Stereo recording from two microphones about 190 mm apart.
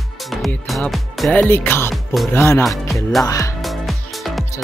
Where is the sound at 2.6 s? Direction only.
Centre (ahead or behind).